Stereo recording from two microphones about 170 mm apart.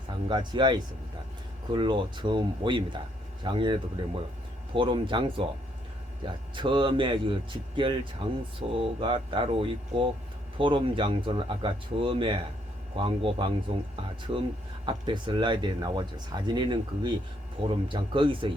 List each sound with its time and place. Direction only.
0.3 s speech: 25° right (ahead or behind)
6.6 s speech: 30° right (ahead or behind)
14.8 s speech: 30° right (ahead or behind)